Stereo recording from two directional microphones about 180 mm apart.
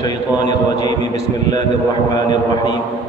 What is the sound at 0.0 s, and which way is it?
Speech, 20° left (ahead or behind).